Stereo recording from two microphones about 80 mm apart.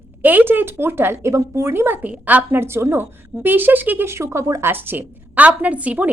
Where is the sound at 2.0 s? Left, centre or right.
Centre.